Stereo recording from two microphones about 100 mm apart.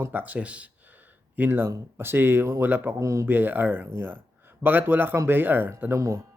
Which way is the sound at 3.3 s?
20° right (ahead or behind).